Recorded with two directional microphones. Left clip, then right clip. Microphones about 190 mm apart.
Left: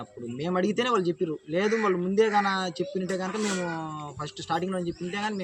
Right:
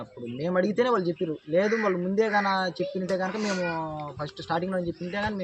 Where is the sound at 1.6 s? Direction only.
15° left (ahead or behind).